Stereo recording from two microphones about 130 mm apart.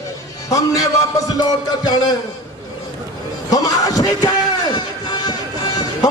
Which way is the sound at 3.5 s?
30° left (ahead or behind).